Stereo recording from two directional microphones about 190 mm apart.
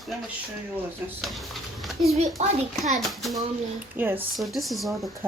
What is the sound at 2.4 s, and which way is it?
Speech, 35° right (ahead or behind).